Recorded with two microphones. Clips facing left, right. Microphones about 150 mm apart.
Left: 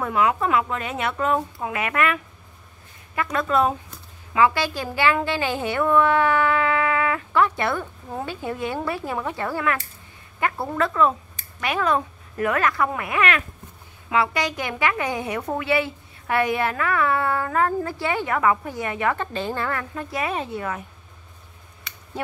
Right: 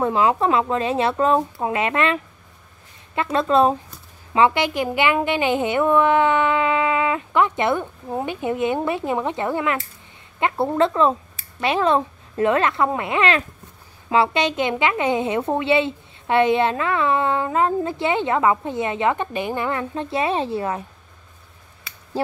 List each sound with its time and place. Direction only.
0.0 s a woman's voice: 30° right (ahead or behind)